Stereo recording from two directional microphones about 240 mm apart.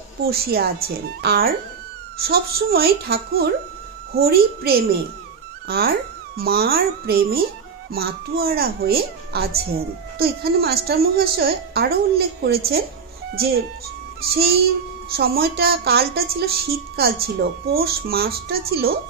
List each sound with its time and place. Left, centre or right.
0.2 s a woman's voice: right